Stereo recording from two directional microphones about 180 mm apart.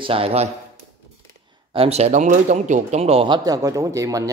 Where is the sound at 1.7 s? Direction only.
35° right (ahead or behind).